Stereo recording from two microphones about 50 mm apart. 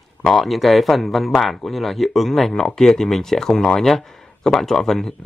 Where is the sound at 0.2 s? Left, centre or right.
Centre.